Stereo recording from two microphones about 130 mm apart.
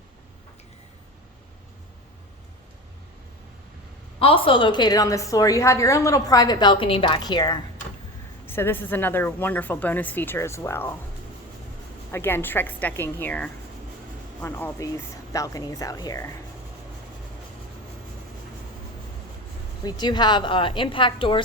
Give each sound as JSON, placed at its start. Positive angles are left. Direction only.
{"t": 4.2, "sound": "a woman's voice", "side_deg": 45}
{"t": 8.4, "sound": "a woman's voice", "side_deg": 15}
{"t": 12.1, "sound": "a woman's voice", "side_deg": 15}
{"t": 19.8, "sound": "a woman's voice", "side_deg": 35}